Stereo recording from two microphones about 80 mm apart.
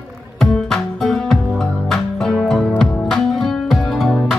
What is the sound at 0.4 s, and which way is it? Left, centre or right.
Music, centre.